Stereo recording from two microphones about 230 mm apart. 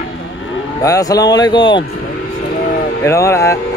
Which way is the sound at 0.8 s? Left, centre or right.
Centre.